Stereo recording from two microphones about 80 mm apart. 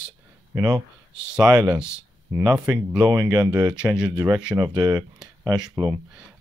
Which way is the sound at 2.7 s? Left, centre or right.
Right.